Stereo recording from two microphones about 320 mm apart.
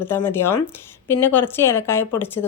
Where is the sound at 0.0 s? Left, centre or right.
Centre.